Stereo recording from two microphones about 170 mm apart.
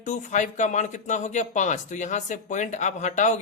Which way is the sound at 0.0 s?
45° left (ahead or behind).